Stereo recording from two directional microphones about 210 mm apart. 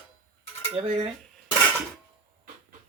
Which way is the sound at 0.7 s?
30° right (ahead or behind).